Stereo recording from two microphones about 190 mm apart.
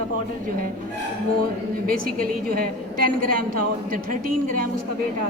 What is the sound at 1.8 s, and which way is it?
A woman's voice, 50° right (ahead or behind).